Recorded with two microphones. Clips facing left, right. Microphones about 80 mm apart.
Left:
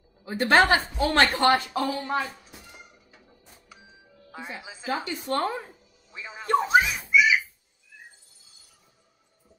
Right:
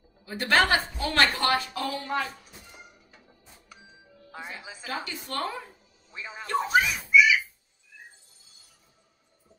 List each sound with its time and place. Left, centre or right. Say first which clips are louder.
0.2 s a woman's voice: left 4 dB; left
2.4 s a sound: left 1 dB; centre
4.3 s speech: left 1 dB; centre
6.1 s speech: even; centre
6.7 s giggle: right 2 dB; left